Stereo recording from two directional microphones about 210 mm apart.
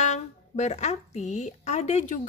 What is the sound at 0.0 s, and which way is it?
A woman's voice, 35° left (ahead or behind).